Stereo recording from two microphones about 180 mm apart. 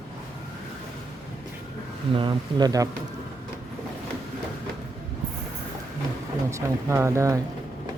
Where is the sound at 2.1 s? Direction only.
25° right (ahead or behind).